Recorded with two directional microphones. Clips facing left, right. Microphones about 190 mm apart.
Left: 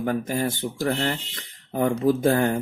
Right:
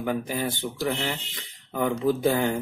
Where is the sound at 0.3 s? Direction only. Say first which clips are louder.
Left 3 dB; 45° left (ahead or behind).